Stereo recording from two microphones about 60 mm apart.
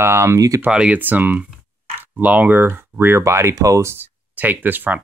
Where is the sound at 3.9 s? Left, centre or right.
Right.